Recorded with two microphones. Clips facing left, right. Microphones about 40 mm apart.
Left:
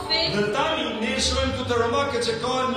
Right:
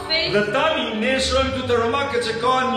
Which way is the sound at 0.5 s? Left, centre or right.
Right.